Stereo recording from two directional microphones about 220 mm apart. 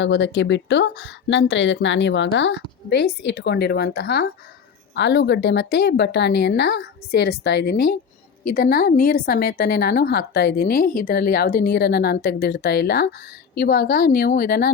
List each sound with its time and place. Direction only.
0.0 s a woman's voice: 55° left (ahead or behind)